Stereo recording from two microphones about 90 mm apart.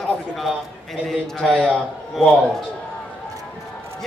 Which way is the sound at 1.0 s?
5° left (ahead or behind).